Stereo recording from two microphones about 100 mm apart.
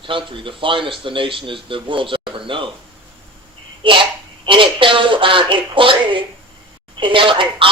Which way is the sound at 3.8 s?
55° right (ahead or behind).